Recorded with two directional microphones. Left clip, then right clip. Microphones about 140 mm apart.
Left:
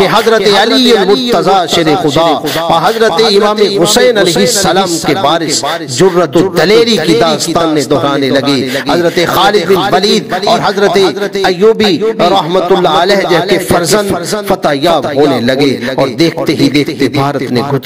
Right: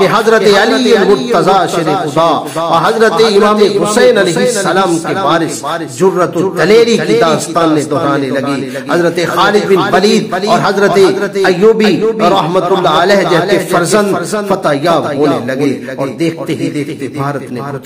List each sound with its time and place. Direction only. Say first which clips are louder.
0.0 s a man's voice: left 1 dB; 45° left (ahead or behind)